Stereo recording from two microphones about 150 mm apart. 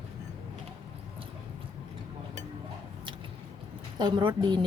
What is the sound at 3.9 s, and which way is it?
Speech, 30° right (ahead or behind).